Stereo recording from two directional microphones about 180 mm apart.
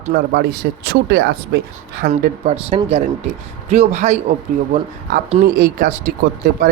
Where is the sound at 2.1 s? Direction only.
35° right (ahead or behind).